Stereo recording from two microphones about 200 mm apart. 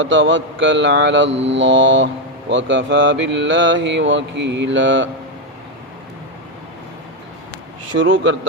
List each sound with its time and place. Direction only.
0.0 s mantra: 70° right (ahead or behind)
7.9 s mantra: 70° right (ahead or behind)